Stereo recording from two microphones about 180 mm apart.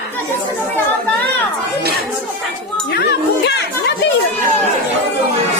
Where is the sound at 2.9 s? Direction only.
65° left (ahead or behind).